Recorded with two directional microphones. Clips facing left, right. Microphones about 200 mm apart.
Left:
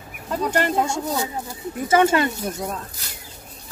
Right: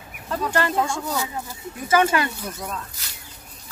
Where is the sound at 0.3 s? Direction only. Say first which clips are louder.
Left 2 dB; 15° left (ahead or behind).